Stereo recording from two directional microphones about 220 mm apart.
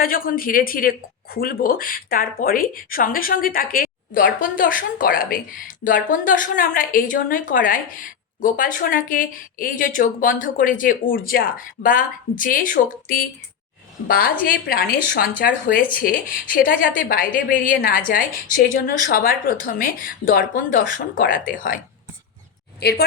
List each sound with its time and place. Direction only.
0.0 s speech: 40° left (ahead or behind)
14.4 s speech: 40° left (ahead or behind)
22.8 s a woman's voice: 45° left (ahead or behind)